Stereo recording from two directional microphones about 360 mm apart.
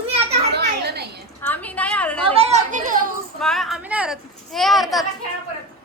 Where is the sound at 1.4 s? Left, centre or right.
Centre.